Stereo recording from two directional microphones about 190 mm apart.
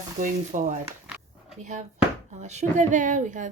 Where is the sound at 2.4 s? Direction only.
40° right (ahead or behind).